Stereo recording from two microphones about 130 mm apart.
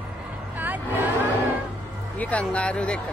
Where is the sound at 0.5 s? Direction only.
15° right (ahead or behind).